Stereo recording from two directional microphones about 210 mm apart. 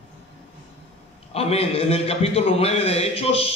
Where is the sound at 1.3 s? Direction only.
30° left (ahead or behind).